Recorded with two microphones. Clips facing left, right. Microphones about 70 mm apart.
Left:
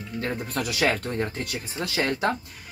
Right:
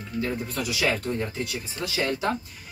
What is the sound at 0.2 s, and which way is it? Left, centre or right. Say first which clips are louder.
Speech: even; left.